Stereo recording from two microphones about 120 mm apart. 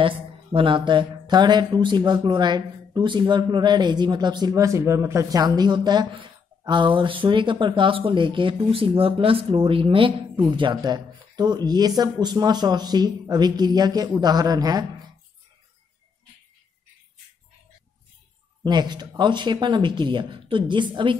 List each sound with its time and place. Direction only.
0.0 s speech: 45° right (ahead or behind); by 5.4 s 25° right (ahead or behind)
5.4 s speech: 35° right (ahead or behind)
18.6 s speech: 35° right (ahead or behind)